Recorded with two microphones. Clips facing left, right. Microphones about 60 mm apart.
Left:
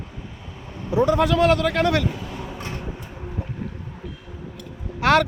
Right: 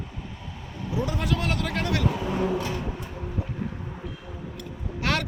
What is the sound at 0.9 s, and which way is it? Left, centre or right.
A man's voice, left.